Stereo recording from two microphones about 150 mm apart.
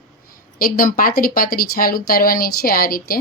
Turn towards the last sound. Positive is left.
turn(degrees=75)  # may be behind; listen again after turning